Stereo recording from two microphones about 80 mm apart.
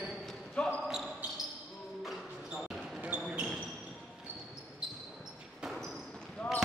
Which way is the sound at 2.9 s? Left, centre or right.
Right.